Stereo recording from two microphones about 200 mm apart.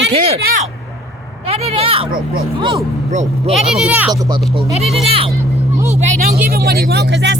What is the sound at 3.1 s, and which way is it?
Speech, 35° right (ahead or behind).